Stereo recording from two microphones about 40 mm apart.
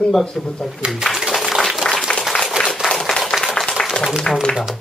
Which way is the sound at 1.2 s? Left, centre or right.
Centre.